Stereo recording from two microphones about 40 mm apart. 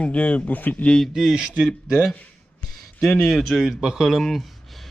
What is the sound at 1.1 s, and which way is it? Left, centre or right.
Speech, centre.